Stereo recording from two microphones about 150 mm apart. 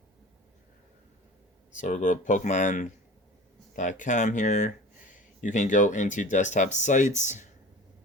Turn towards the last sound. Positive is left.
turn(degrees=55)  # may be behind; listen again after turning